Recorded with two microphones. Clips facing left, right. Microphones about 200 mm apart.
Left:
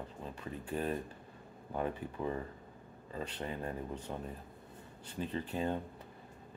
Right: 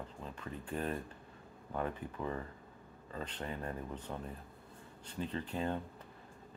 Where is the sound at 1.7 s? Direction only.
20° left (ahead or behind).